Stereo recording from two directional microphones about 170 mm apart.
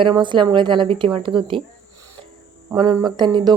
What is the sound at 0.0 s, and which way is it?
A woman's voice, 30° right (ahead or behind).